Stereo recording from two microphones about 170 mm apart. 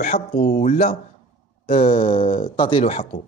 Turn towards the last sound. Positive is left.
turn(degrees=40)  # may be behind; listen again after turning